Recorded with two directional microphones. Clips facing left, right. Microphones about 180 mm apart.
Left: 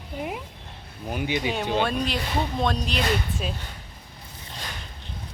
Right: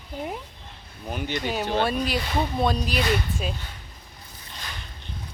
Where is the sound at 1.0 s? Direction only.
10° left (ahead or behind).